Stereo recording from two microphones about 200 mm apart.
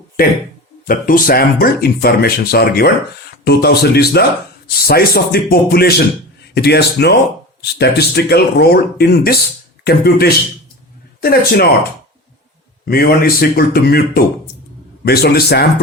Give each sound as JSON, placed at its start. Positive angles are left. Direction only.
{"t": 0.9, "sound": "speech", "side_deg": 45}